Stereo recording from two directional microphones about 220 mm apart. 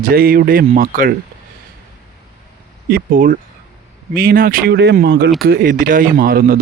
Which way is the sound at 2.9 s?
40° right (ahead or behind).